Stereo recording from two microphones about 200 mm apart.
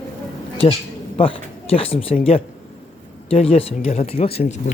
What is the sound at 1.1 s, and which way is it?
Speech, 25° left (ahead or behind).